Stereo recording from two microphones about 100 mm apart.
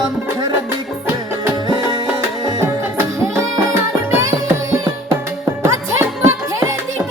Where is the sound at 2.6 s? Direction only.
25° right (ahead or behind).